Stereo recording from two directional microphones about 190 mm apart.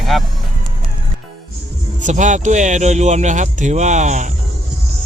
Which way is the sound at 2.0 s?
40° right (ahead or behind).